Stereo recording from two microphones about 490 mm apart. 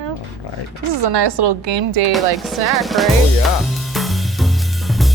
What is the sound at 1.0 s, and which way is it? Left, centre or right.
Speech, right.